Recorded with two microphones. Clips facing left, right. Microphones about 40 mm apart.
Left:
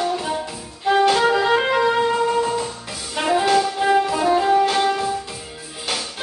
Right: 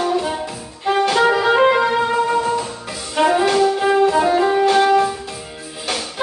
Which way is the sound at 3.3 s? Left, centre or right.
Centre.